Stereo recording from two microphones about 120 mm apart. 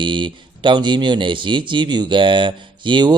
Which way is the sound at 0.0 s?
40° right (ahead or behind).